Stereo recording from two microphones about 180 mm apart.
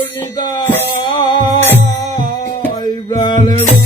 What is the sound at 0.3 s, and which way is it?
Music, 25° left (ahead or behind).